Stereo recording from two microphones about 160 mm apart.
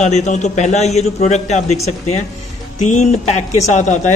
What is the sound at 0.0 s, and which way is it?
Speech, 45° left (ahead or behind).